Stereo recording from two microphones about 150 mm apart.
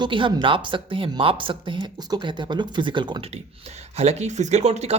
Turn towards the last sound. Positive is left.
turn(degrees=-45)  # may be behind; listen again after turning